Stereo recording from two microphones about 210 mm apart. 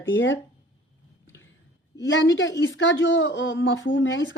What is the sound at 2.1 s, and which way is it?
Speech, 60° left (ahead or behind).